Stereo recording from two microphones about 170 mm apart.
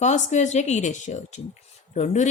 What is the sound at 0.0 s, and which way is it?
Speech, 45° left (ahead or behind).